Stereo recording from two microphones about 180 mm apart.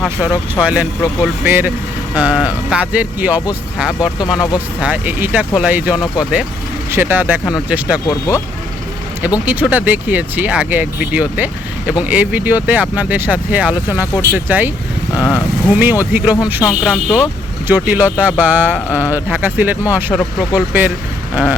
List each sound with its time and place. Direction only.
0.0 s speech: 5° right (ahead or behind)
8.0 s speech: 20° left (ahead or behind)
9.5 s speech: 10° right (ahead or behind)
15.7 s speech: 10° right (ahead or behind)
16.6 s speech: 5° left (ahead or behind)
17.7 s speech: 10° right (ahead or behind)